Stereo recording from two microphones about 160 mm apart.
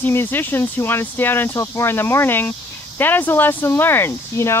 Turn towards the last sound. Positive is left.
turn(degrees=15)  # may be behind; listen again after turning